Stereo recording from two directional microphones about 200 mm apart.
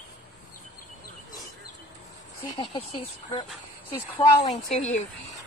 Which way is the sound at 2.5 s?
25° left (ahead or behind).